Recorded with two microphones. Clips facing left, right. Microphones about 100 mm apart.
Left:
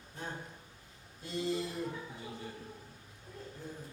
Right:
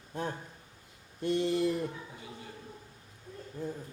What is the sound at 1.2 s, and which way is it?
Speech, 60° right (ahead or behind).